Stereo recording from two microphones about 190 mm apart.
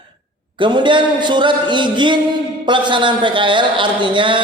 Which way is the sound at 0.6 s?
25° right (ahead or behind).